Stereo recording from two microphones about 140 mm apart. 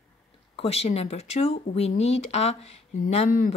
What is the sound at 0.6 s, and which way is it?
A woman's voice, 45° left (ahead or behind).